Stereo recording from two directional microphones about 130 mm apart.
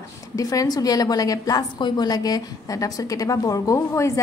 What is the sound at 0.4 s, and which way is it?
A woman's voice, 25° left (ahead or behind).